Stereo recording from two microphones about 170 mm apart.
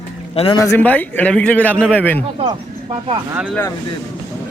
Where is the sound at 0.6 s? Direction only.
15° left (ahead or behind).